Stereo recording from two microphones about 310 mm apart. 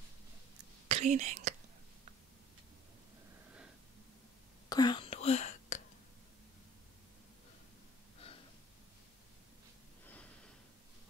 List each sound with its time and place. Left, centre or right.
0.8 s speech: right
4.6 s whispering: centre